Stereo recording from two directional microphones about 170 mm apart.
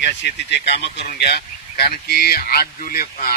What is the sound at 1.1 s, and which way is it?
Speech, 70° left (ahead or behind).